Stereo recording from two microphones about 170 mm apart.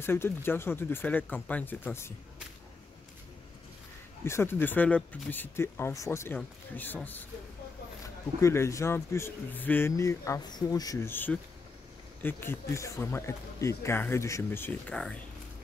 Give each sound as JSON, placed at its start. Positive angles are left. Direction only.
{"t": 0.0, "sound": "speech", "side_deg": 15}
{"t": 4.2, "sound": "speech", "side_deg": 15}
{"t": 8.4, "sound": "speech", "side_deg": 15}